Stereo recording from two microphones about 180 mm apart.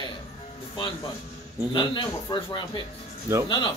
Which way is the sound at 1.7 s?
25° left (ahead or behind).